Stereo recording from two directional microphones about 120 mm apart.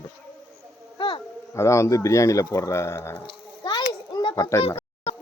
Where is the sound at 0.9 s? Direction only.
45° left (ahead or behind).